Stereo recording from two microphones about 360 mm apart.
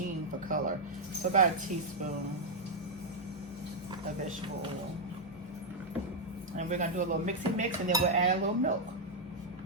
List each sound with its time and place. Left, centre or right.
0.4 s a sound: right
1.2 s speech: right
6.6 s speech: centre